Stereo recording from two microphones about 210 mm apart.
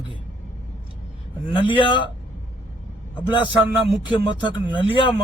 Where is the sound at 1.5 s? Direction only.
20° left (ahead or behind).